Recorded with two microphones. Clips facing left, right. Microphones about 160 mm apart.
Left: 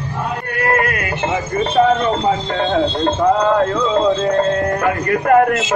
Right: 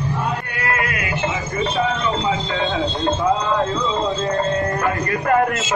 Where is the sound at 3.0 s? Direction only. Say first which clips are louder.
Left 3 dB; 65° left (ahead or behind).